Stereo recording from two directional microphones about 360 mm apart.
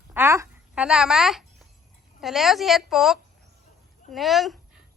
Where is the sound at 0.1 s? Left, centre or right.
Centre.